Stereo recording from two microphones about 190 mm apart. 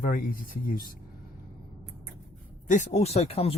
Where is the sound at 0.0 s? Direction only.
45° left (ahead or behind).